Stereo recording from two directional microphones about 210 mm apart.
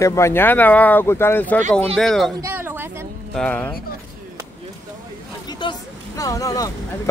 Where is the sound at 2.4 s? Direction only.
10° right (ahead or behind).